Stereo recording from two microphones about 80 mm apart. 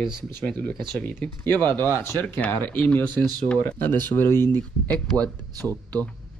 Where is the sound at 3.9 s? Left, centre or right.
Left.